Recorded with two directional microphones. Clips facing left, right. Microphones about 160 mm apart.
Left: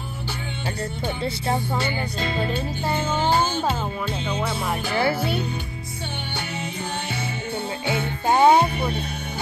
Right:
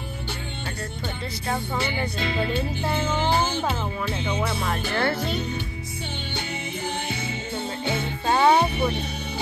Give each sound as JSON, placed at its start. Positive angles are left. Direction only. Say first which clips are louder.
{"t": 2.1, "sound": "music", "louder": "left 1 dB", "side_deg": 45}
{"t": 4.6, "sound": "music", "louder": "left 4 dB", "side_deg": 5}
{"t": 8.3, "sound": "music", "louder": "left 3 dB", "side_deg": 15}